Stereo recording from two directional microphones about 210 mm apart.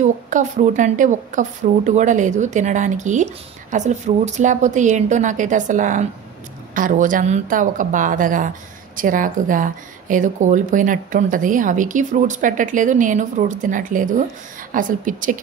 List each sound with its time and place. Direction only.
0.0 s a woman's voice: 35° right (ahead or behind)